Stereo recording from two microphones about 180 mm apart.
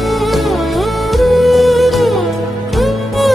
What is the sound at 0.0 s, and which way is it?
Music, centre (ahead or behind).